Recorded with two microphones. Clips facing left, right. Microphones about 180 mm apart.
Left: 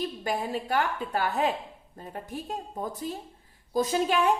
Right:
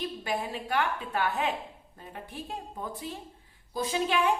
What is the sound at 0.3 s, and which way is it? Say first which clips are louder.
A woman's voice: left 3 dB; 40° left (ahead or behind).